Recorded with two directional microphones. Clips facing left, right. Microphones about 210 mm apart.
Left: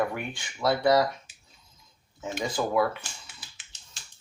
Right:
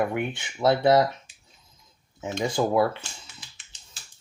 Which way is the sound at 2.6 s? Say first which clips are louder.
Right 5 dB; 25° right (ahead or behind).